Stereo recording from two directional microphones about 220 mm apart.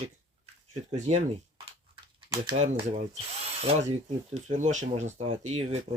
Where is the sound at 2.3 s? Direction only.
20° right (ahead or behind).